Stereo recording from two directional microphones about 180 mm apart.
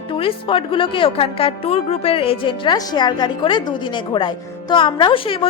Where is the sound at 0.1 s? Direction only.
30° left (ahead or behind).